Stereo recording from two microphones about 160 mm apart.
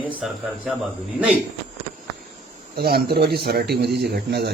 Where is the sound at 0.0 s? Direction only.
10° right (ahead or behind).